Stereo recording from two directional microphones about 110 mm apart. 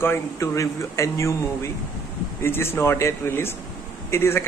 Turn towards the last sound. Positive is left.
turn(degrees=25)  # may be behind; listen again after turning